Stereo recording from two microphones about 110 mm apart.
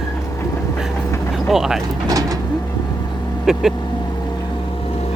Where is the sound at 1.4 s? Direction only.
5° right (ahead or behind).